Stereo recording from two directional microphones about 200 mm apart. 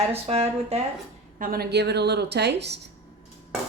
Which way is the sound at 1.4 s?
50° right (ahead or behind).